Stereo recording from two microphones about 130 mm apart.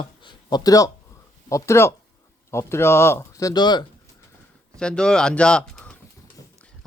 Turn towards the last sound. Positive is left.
turn(degrees=10)  # may be behind; listen again after turning